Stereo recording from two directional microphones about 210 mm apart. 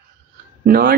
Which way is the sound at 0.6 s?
45° right (ahead or behind).